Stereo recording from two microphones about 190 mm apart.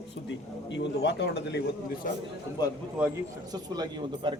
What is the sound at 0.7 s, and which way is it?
Speech, 65° left (ahead or behind).